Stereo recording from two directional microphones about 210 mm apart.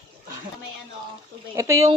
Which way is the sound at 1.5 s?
15° right (ahead or behind).